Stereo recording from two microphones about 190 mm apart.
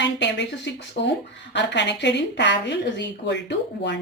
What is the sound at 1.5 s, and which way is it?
Speech, 65° left (ahead or behind).